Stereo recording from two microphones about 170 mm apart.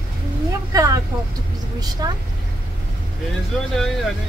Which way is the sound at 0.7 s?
20° right (ahead or behind).